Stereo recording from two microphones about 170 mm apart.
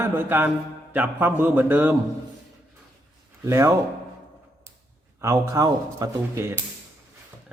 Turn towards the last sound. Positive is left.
turn(degrees=-20)  # may be behind; listen again after turning